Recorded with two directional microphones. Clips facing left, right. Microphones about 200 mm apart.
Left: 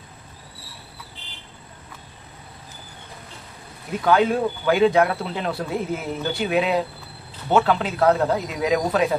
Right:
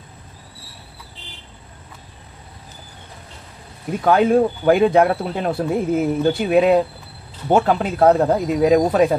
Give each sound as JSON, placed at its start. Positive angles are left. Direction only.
{"t": 4.0, "sound": "speech", "side_deg": -45}